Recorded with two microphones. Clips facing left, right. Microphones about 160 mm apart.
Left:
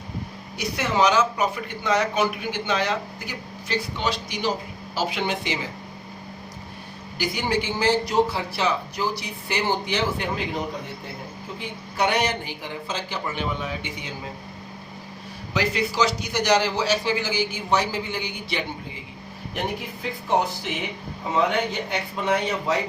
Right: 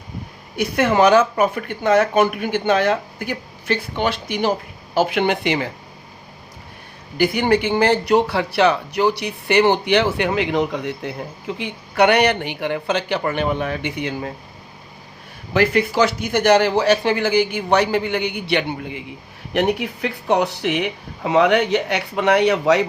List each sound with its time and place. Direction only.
0.5 s speech: 55° right (ahead or behind)
7.2 s speech: 60° right (ahead or behind)
15.5 s speech: 55° right (ahead or behind); by 22.9 s 75° right (ahead or behind)